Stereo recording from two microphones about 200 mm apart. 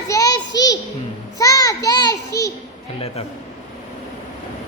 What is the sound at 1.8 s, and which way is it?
Speech, 20° left (ahead or behind).